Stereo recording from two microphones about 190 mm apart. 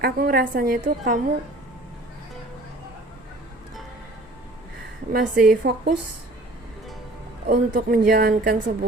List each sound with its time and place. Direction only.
0.0 s speech: 50° right (ahead or behind)
5.1 s speech: 50° right (ahead or behind)
7.4 s speech: 45° right (ahead or behind)